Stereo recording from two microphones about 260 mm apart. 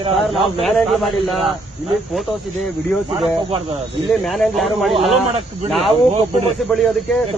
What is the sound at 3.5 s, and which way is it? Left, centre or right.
Speech, right.